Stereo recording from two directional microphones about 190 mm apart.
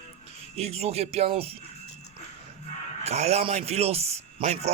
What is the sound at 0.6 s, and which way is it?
Music, 35° right (ahead or behind).